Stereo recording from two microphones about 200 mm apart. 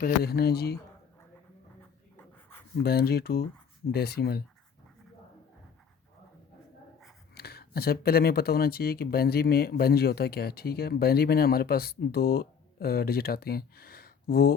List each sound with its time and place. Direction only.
0.0 s speech: 50° left (ahead or behind)
2.1 s a sound: 10° left (ahead or behind)
2.8 s speech: 50° left (ahead or behind)
7.3 s speech: 50° left (ahead or behind)